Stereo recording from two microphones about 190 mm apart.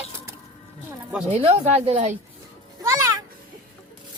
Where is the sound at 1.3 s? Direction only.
30° right (ahead or behind).